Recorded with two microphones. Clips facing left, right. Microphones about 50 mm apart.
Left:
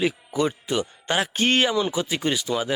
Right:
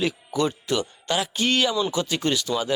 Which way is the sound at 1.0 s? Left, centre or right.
Left.